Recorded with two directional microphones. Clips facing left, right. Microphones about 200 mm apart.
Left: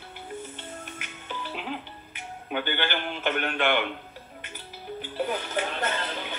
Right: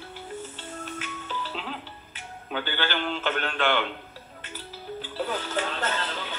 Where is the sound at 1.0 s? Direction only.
15° left (ahead or behind).